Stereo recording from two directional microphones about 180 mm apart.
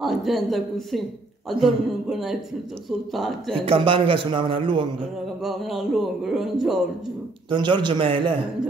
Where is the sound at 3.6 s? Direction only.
30° right (ahead or behind).